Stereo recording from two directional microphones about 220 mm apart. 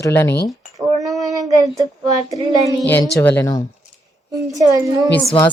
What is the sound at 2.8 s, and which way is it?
Speech, 10° left (ahead or behind).